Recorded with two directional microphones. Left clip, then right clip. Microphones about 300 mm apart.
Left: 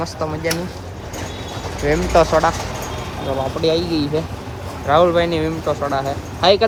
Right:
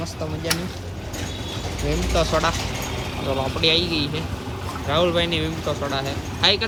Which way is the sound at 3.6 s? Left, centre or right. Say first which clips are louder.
Left 1 dB; centre.